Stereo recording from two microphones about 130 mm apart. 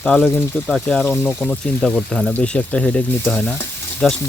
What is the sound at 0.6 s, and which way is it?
Speech, 5° left (ahead or behind).